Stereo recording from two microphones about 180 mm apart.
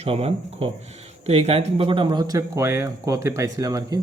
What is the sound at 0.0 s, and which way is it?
Speech, 35° right (ahead or behind).